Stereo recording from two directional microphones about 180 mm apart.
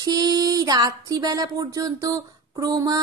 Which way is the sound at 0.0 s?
20° right (ahead or behind).